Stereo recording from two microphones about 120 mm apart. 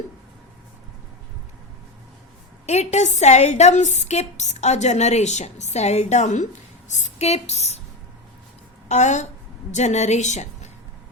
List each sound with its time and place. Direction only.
2.6 s a woman's voice: 70° left (ahead or behind)
8.9 s a woman's voice: 75° left (ahead or behind)